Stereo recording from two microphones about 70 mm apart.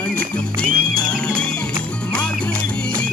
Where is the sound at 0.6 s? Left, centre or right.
Centre.